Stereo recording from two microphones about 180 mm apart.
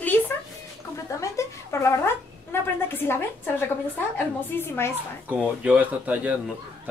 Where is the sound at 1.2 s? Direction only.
15° left (ahead or behind).